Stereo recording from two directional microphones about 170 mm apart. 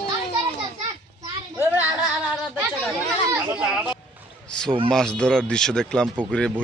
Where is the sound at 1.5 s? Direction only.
10° right (ahead or behind).